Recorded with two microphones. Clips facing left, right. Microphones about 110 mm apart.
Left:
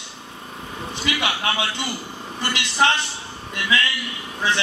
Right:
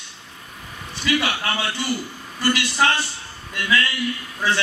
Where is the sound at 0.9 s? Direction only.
20° left (ahead or behind).